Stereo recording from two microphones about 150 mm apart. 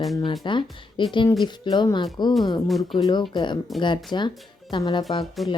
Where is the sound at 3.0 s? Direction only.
30° left (ahead or behind).